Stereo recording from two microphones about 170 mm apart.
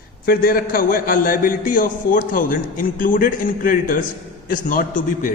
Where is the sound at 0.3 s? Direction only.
60° left (ahead or behind).